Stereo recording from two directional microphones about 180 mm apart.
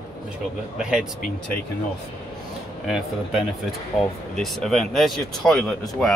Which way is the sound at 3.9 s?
Centre (ahead or behind).